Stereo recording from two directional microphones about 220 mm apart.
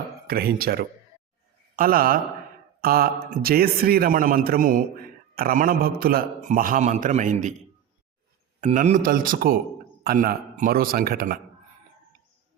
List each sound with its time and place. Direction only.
0.3 s a man's voice: 45° right (ahead or behind)
8.6 s a man's voice: 35° right (ahead or behind)